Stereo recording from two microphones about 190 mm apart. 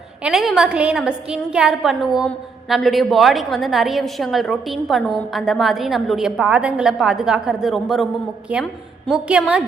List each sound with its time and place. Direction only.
0.2 s a woman's voice: centre (ahead or behind)